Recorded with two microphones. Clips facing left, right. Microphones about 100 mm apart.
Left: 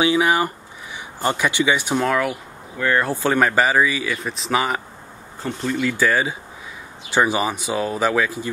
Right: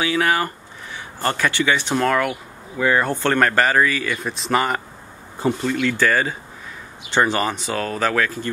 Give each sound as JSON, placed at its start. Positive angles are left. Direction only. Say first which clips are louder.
{"t": 0.0, "sound": "speech", "louder": "left 2 dB", "side_deg": 20}
{"t": 2.8, "sound": "speech", "louder": "right 1 dB", "side_deg": -5}
{"t": 3.1, "sound": "speech", "louder": "even", "side_deg": 5}